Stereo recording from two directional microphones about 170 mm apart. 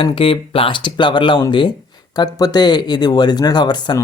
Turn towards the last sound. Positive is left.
turn(degrees=25)  # may be behind; listen again after turning